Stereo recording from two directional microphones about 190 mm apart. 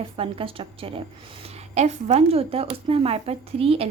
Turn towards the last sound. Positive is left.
turn(degrees=-30)  # may be behind; listen again after turning